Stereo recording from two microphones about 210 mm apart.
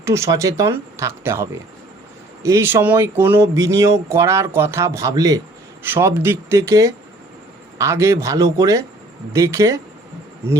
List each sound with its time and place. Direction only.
0.0 s speech: 15° right (ahead or behind)